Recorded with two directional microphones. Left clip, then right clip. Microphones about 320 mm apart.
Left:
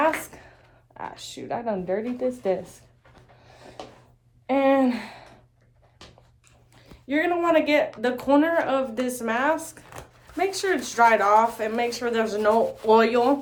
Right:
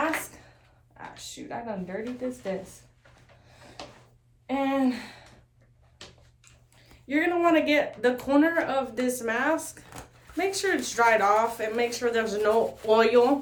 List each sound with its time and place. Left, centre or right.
0.9 s speech: left
4.4 s speech: left
7.1 s speech: centre